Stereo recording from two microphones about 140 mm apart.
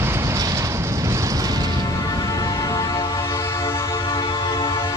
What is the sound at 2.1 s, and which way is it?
Music, 20° left (ahead or behind).